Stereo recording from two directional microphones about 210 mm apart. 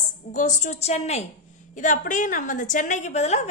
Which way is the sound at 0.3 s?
35° left (ahead or behind).